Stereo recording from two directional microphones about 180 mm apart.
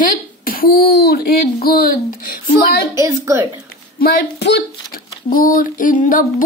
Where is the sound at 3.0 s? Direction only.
15° right (ahead or behind).